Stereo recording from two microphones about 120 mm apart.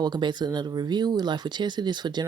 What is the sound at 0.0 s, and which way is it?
Speech, 40° right (ahead or behind).